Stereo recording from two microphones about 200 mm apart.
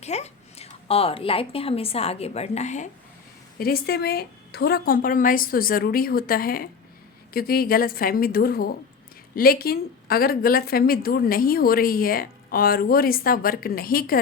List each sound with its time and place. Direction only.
0.0 s a woman's voice: 35° left (ahead or behind)
3.6 s a woman's voice: 50° left (ahead or behind)